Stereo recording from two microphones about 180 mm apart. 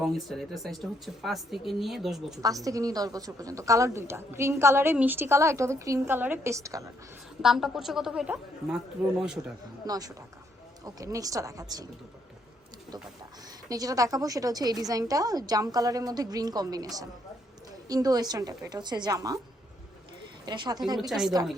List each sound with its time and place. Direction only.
0.0 s speech: centre (ahead or behind)
2.6 s a woman's voice: 20° right (ahead or behind)
7.4 s speech: centre (ahead or behind)
9.8 s a woman's voice: 20° right (ahead or behind)
13.7 s a woman's voice: 20° right (ahead or behind)
20.4 s a woman's voice: 25° right (ahead or behind)
21.1 s speech: 5° right (ahead or behind)